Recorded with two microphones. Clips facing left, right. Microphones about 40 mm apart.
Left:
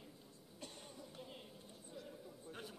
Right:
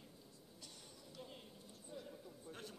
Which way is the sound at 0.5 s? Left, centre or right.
Left.